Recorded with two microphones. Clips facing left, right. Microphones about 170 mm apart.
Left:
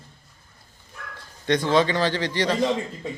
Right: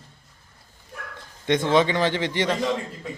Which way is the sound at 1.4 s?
20° right (ahead or behind).